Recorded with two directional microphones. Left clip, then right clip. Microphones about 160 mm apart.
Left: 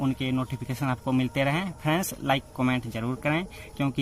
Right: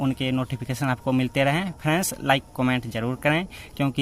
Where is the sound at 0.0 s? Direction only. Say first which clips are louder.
Right 3 dB; 25° right (ahead or behind).